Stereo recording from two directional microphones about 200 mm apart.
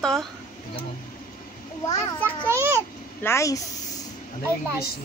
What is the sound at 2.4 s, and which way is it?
Speech, 15° right (ahead or behind).